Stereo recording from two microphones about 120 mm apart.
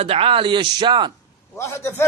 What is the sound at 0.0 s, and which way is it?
Speech, 55° right (ahead or behind).